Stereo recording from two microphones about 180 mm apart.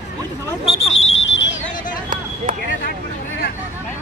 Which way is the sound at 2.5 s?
50° right (ahead or behind).